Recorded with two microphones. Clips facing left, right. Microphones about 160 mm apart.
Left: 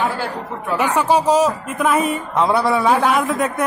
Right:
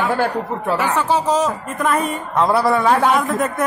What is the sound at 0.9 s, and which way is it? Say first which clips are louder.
Speech: left 5 dB; 10° left (ahead or behind).